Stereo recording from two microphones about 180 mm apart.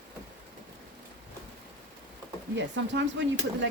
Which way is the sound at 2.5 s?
80° right.